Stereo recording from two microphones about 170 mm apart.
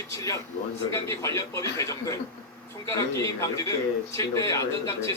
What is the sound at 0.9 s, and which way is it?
A man's voice, 20° left (ahead or behind).